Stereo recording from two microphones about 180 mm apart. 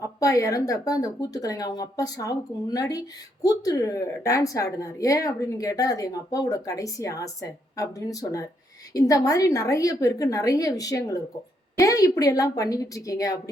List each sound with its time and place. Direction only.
0.2 s speech: 20° left (ahead or behind)